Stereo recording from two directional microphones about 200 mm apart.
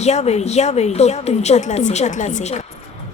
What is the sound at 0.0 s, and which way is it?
A woman's voice, 35° left (ahead or behind).